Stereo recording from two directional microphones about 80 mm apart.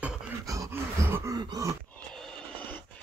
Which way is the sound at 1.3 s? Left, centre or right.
Right.